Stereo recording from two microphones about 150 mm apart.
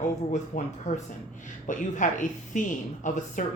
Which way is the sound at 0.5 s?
75° left (ahead or behind).